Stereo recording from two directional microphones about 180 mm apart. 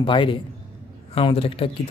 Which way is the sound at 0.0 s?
25° left (ahead or behind).